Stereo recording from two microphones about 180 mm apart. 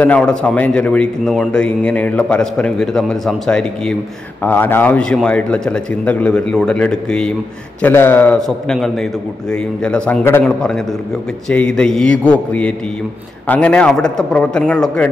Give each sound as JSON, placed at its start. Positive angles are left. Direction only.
{"t": 0.0, "sound": "a man's voice", "side_deg": 5}